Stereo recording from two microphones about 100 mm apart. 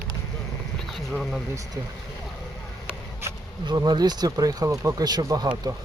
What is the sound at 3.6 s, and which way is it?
Speech, 45° right (ahead or behind).